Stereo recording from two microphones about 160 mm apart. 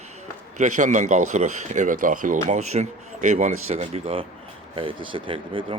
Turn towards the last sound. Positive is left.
turn(degrees=-30)  # may be behind; listen again after turning